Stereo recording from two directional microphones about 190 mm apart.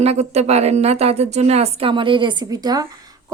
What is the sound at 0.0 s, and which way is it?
A woman's voice, 35° right (ahead or behind).